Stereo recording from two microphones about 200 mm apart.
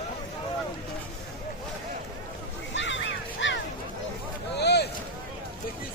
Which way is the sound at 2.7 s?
65° left (ahead or behind).